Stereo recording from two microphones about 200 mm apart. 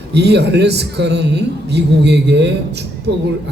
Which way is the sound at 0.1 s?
55° right (ahead or behind).